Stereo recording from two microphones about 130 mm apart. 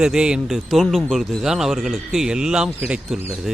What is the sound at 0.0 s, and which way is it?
Speech, 5° right (ahead or behind).